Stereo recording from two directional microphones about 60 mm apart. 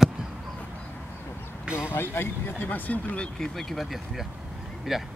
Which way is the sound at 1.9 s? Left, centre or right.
Left.